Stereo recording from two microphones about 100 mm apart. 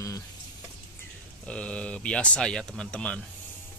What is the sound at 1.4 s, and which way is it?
Speech, 10° left (ahead or behind).